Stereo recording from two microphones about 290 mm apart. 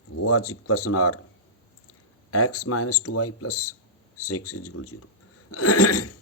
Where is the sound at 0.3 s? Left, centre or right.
Left.